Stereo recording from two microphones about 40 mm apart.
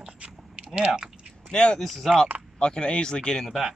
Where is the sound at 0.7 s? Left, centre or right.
Right.